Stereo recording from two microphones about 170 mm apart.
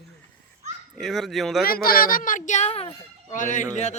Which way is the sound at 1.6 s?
60° left (ahead or behind).